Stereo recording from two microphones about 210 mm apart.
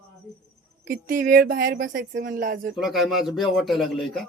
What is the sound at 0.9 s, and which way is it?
Speech, 40° right (ahead or behind).